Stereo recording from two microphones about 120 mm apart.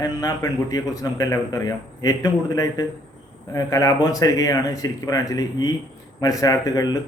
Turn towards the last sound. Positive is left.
turn(degrees=30)  # may be behind; listen again after turning